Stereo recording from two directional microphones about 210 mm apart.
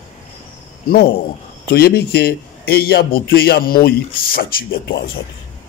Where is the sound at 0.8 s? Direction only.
45° left (ahead or behind).